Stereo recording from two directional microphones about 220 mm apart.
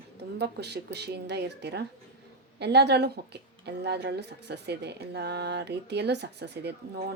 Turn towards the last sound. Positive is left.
turn(degrees=-45)  # may be behind; listen again after turning